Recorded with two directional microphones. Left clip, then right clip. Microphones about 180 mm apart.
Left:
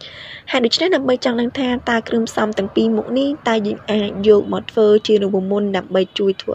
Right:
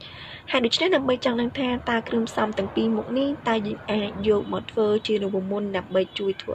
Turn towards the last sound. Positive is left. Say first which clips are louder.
# left 8 dB
turn(degrees=35)  # may be behind; listen again after turning